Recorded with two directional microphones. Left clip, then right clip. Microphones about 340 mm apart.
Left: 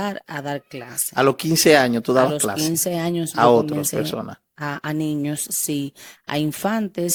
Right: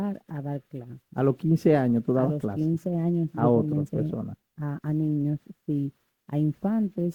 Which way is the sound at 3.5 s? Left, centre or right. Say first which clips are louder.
Left 8 dB; centre.